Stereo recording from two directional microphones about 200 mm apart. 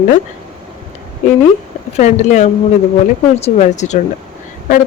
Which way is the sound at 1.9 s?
35° left (ahead or behind).